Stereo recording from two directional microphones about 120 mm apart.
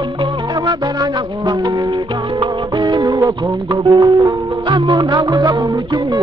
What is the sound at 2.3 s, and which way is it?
Music, 40° right (ahead or behind).